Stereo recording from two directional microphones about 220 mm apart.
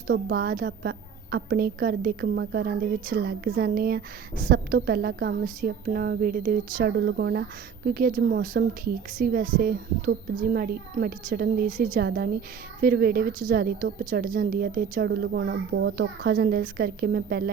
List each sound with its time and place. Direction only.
0.1 s a woman's voice: 40° right (ahead or behind)